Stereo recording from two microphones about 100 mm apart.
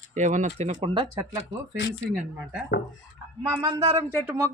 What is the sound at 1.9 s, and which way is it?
Speech, 5° right (ahead or behind).